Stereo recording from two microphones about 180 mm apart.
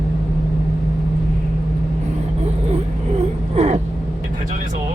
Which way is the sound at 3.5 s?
35° right (ahead or behind).